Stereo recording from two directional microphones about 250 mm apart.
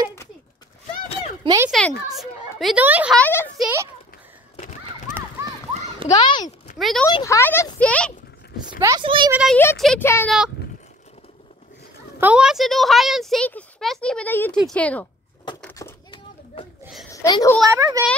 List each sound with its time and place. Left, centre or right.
1.4 s speech: centre
1.7 s speech: centre
3.2 s speech: centre
4.6 s a sound: left
6.0 s speech: centre
6.8 s speech: centre
7.1 s speech: centre
8.5 s speech: centre
9.3 s speech: centre
12.2 s speech: centre
15.6 s a sound: centre
17.1 s a child's voice: centre
17.7 s a child's voice: centre